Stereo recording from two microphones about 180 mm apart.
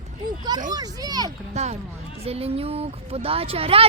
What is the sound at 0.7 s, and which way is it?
Speech, 20° right (ahead or behind).